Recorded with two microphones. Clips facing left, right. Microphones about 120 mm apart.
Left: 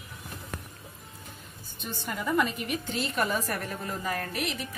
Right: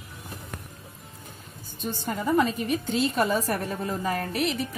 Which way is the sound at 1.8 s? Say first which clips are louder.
Right 5 dB; 40° right (ahead or behind).